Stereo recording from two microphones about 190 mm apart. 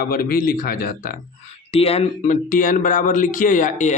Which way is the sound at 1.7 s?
30° left (ahead or behind).